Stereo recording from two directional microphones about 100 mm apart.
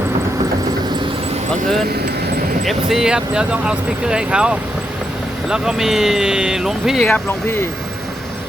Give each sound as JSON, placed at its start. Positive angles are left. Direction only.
{"t": 2.6, "sound": "speech", "side_deg": -5}
{"t": 7.0, "sound": "speech", "side_deg": 15}